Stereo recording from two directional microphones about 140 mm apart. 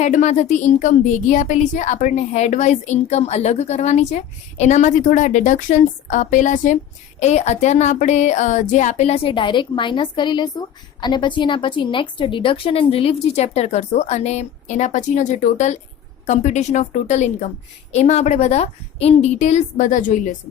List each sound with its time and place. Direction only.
0.0 s a woman's voice: 60° left (ahead or behind)